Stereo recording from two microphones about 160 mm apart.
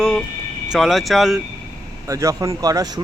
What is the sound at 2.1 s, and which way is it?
Speech, 20° right (ahead or behind).